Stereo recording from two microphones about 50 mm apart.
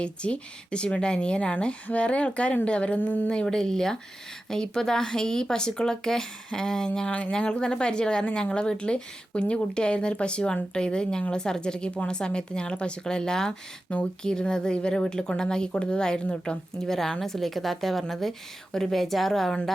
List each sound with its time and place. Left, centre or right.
0.0 s speech: left
3.4 s speech: centre
7.1 s a woman's voice: left; by 19.5 s centre